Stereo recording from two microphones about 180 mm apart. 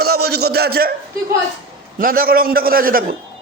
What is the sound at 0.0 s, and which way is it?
Speech, 60° right (ahead or behind).